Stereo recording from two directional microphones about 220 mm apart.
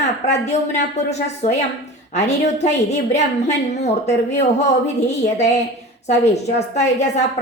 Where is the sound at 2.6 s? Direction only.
30° left (ahead or behind).